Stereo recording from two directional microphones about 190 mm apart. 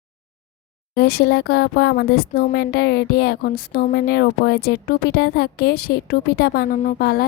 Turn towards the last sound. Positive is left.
turn(degrees=55)  # may be behind; listen again after turning